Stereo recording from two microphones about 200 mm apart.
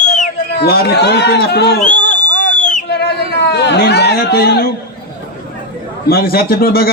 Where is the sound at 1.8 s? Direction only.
40° left (ahead or behind).